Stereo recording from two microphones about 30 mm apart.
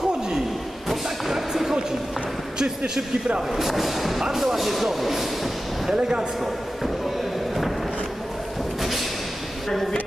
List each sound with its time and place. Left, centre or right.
1.3 s a sound: centre
2.6 s speech: right
3.5 s speech: centre
5.9 s speech: right